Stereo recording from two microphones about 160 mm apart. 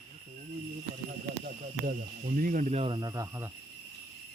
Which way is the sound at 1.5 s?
60° right (ahead or behind).